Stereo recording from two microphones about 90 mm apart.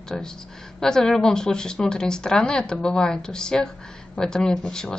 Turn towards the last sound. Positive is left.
turn(degrees=10)  # may be behind; listen again after turning